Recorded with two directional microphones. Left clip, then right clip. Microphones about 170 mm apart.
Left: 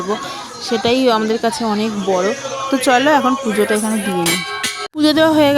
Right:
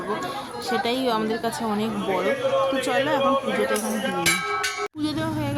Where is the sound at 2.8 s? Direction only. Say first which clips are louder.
Left 10 dB; 45° left (ahead or behind).